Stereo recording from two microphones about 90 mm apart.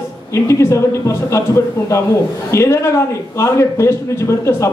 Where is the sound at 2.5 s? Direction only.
35° left (ahead or behind).